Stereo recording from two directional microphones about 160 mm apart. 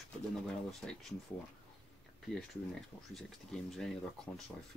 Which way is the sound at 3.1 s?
Centre (ahead or behind).